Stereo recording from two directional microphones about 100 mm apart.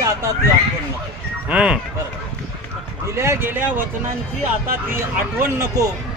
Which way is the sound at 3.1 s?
25° right (ahead or behind).